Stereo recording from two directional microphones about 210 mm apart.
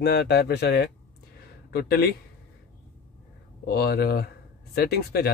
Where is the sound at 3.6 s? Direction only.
50° left (ahead or behind).